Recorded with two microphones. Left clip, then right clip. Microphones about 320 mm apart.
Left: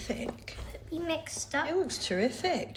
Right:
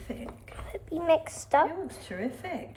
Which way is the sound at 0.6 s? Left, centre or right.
Centre.